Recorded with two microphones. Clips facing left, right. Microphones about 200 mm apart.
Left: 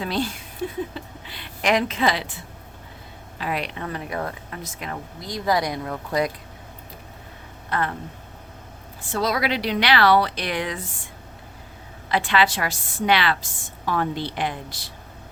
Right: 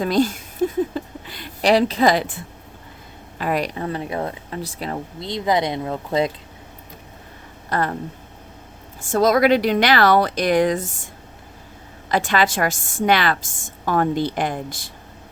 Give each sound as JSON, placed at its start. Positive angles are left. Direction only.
{"t": 0.0, "sound": "a sound", "side_deg": -45}
{"t": 3.3, "sound": "a woman's voice", "side_deg": -45}
{"t": 3.8, "sound": "speech", "side_deg": -25}
{"t": 7.7, "sound": "speech", "side_deg": -40}
{"t": 9.0, "sound": "a woman's voice", "side_deg": -45}